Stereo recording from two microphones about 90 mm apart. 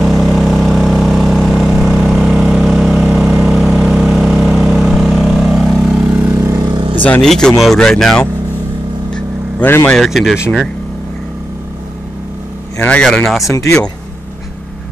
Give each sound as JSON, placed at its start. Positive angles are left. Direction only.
{"t": 0.0, "sound": "vehicle", "side_deg": 0}
{"t": 6.1, "sound": "vehicle", "side_deg": -25}
{"t": 7.2, "sound": "speech", "side_deg": 5}
{"t": 10.0, "sound": "speech", "side_deg": 0}
{"t": 12.7, "sound": "speech", "side_deg": 10}
{"t": 13.4, "sound": "speech", "side_deg": 35}